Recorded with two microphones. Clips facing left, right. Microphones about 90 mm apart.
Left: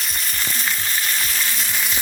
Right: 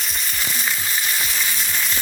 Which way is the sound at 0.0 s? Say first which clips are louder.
Even; centre (ahead or behind).